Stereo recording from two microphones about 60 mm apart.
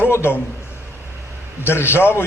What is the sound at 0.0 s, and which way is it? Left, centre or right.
Speech, left.